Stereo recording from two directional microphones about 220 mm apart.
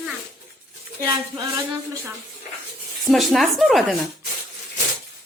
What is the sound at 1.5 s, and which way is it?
Speech, 15° right (ahead or behind).